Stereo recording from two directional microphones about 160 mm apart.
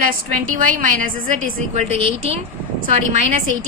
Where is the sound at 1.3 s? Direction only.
45° right (ahead or behind).